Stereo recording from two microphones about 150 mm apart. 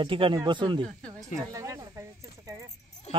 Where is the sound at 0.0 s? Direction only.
35° right (ahead or behind).